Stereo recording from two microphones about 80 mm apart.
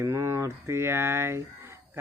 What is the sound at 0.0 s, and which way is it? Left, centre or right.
Speech, right.